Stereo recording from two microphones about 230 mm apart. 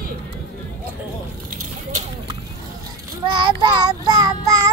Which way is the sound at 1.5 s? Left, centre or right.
Right.